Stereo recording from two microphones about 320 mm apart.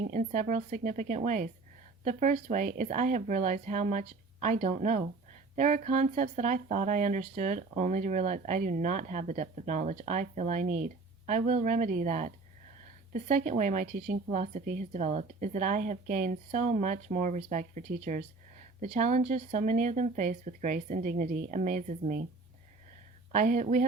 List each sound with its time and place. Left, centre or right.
0.0 s speech: right
23.3 s speech: right